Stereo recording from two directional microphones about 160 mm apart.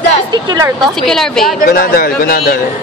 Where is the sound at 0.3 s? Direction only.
25° right (ahead or behind).